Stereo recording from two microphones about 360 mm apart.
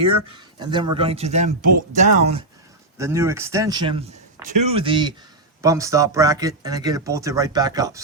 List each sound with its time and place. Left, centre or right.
0.6 s speech: centre
3.0 s speech: centre